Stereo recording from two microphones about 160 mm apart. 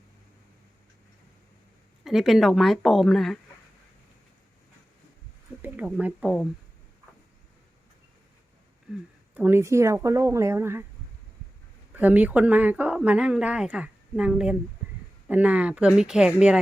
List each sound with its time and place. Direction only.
2.0 s speech: centre (ahead or behind)
5.6 s speech: 10° right (ahead or behind)
9.3 s speech: 10° right (ahead or behind)
11.9 s speech: 10° right (ahead or behind)